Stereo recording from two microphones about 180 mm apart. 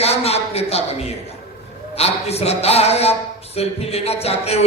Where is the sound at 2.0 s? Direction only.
35° left (ahead or behind).